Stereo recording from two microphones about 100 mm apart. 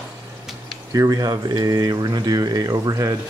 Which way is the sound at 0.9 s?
35° right (ahead or behind).